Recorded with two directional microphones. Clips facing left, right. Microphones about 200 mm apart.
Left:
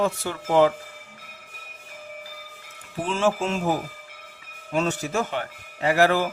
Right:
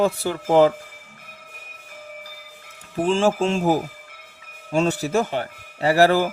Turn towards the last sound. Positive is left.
turn(degrees=-35)  # may be behind; listen again after turning